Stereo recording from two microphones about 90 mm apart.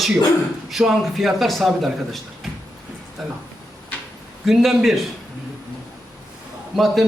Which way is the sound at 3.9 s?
15° left (ahead or behind).